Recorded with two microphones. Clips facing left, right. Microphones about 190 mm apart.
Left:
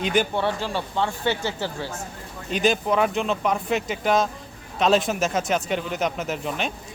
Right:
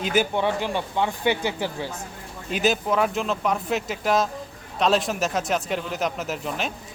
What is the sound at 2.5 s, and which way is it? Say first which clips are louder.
Speech: left 1 dB; 5° right (ahead or behind).